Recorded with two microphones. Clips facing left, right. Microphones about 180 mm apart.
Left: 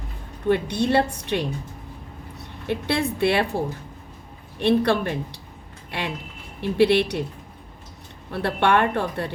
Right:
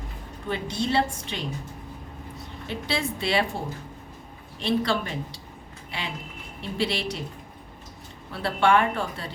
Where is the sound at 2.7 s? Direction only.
60° left (ahead or behind).